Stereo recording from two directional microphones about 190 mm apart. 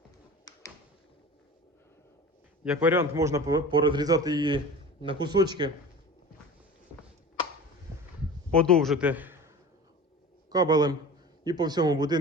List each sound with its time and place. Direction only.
2.6 s a man's voice: 10° right (ahead or behind)
8.5 s a man's voice: 5° left (ahead or behind)
10.5 s a man's voice: 20° right (ahead or behind)